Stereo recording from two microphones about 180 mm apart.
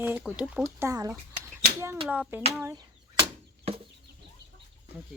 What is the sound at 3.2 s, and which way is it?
Chicken, 30° right (ahead or behind).